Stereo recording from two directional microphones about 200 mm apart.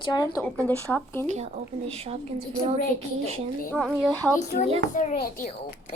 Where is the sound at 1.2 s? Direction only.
35° right (ahead or behind).